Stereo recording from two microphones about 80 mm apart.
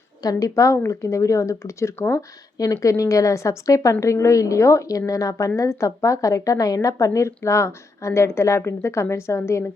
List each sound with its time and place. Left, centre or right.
0.2 s a woman's voice: left